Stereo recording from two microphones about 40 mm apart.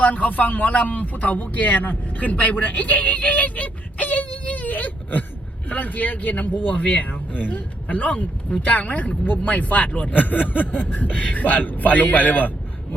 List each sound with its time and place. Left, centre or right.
0.0 s speech: left